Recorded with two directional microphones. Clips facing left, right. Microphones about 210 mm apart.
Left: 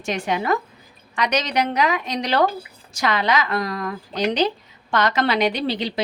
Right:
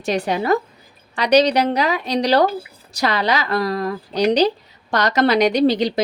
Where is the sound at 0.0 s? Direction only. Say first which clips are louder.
Right 4 dB; 35° right (ahead or behind).